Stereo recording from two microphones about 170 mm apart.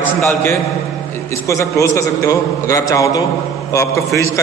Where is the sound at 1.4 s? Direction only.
20° left (ahead or behind).